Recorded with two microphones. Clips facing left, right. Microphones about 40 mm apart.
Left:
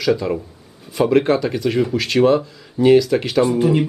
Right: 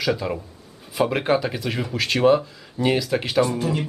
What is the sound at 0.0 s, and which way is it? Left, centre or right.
Speech, centre.